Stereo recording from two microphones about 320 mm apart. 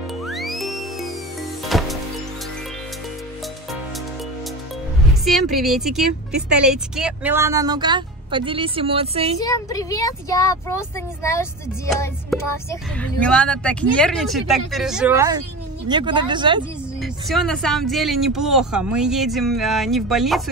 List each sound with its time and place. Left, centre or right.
0.3 s music: centre
5.2 s speech: centre
9.4 s speech: centre
17.0 s speech: centre